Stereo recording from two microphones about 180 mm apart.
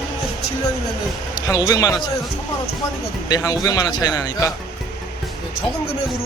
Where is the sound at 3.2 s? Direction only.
20° left (ahead or behind).